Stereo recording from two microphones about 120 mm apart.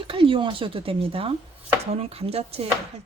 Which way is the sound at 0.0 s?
45° right (ahead or behind).